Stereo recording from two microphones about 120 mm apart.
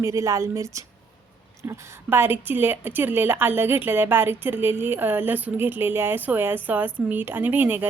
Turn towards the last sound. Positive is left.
turn(degrees=-15)  # may be behind; listen again after turning